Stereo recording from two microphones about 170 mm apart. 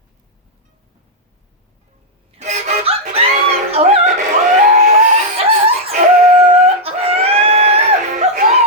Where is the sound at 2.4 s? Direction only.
45° right (ahead or behind).